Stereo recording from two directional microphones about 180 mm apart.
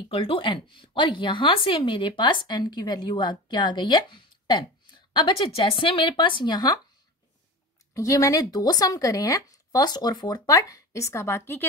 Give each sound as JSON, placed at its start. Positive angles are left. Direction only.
{"t": 0.1, "sound": "speech", "side_deg": 30}
{"t": 7.9, "sound": "speech", "side_deg": 15}